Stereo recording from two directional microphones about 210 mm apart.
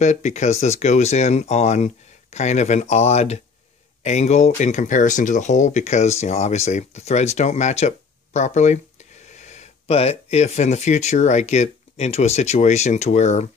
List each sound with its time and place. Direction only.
0.0 s speech: 35° left (ahead or behind)